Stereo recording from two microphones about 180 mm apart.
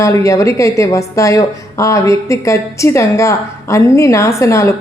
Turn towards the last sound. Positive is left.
turn(degrees=15)  # may be behind; listen again after turning